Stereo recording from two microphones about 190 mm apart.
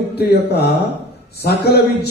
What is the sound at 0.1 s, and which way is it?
Mantra, 60° left (ahead or behind).